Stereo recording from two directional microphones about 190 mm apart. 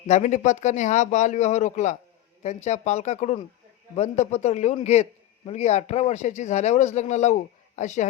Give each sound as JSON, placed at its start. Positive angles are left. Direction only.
{"t": 0.1, "sound": "a man's voice", "side_deg": 40}